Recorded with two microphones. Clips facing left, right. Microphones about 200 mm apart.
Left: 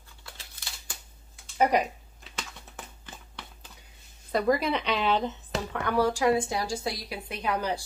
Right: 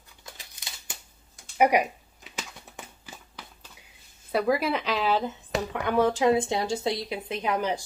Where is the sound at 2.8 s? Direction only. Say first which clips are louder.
Even; 10° right (ahead or behind).